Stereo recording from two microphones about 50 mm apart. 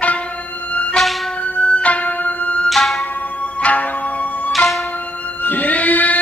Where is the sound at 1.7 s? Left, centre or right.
Left.